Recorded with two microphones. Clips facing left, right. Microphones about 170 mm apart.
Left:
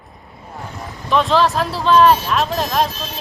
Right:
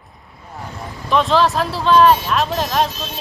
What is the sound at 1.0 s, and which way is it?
Speech, centre (ahead or behind).